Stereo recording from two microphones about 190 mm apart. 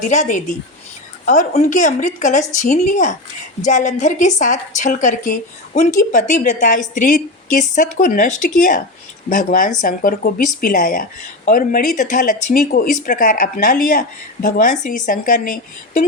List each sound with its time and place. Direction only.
0.0 s a woman's voice: 40° left (ahead or behind)